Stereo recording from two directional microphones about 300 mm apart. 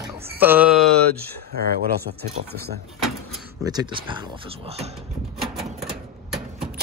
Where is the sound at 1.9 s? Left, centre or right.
Right.